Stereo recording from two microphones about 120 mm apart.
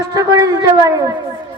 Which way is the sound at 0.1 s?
30° right (ahead or behind).